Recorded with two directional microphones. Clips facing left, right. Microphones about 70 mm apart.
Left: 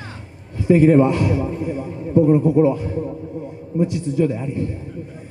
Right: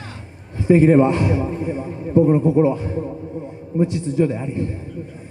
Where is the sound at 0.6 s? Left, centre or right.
Right.